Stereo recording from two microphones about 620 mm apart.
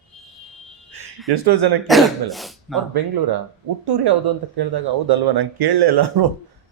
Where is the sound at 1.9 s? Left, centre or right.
Centre.